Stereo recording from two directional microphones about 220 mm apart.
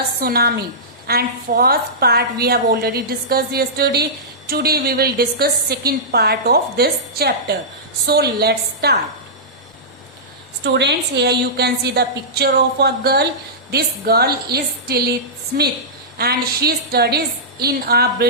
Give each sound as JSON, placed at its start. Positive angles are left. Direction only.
{"t": 0.2, "sound": "a woman's voice", "side_deg": -45}
{"t": 10.6, "sound": "a woman's voice", "side_deg": -50}